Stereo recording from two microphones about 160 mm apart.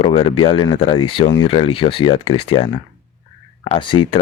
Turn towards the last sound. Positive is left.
turn(degrees=30)  # may be behind; listen again after turning